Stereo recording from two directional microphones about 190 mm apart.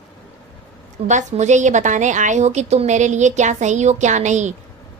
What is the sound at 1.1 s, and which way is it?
A woman's voice, 40° right (ahead or behind).